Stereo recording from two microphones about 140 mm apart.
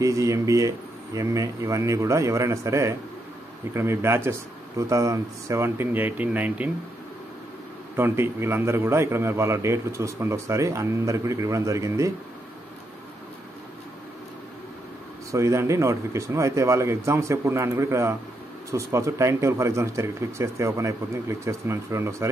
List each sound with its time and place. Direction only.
0.0 s a man's voice: 25° right (ahead or behind)
7.9 s a man's voice: 15° right (ahead or behind)
15.3 s a man's voice: 20° right (ahead or behind)